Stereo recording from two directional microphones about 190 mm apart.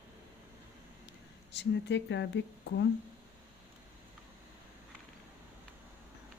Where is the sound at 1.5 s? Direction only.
65° left (ahead or behind).